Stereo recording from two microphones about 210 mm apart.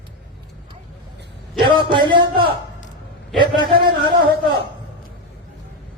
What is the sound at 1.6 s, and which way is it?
Speech, 20° right (ahead or behind).